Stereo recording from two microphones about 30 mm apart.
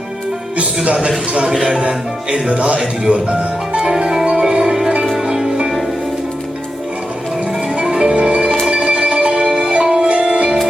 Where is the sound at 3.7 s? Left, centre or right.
Right.